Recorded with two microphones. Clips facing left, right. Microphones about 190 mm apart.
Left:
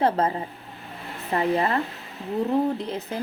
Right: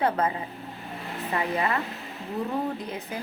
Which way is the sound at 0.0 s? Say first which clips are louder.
Left 3 dB; 30° left (ahead or behind).